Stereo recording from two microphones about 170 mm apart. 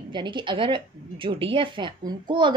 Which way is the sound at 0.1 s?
25° right (ahead or behind).